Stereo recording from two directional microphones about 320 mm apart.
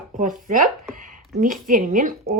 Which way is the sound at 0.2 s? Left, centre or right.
Right.